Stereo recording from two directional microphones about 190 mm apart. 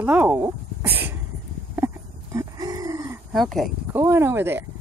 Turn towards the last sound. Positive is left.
turn(degrees=-10)  # may be behind; listen again after turning